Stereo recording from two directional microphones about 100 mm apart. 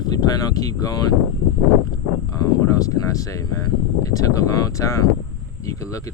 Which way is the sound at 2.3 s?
35° left (ahead or behind).